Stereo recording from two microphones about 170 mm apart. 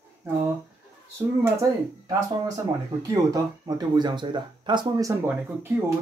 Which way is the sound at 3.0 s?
20° right (ahead or behind).